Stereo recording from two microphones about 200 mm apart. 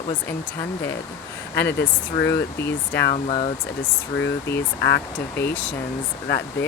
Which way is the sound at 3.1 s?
30° left (ahead or behind).